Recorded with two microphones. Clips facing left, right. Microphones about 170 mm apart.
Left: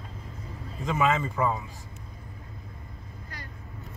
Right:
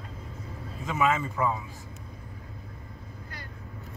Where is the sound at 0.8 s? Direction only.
5° right (ahead or behind).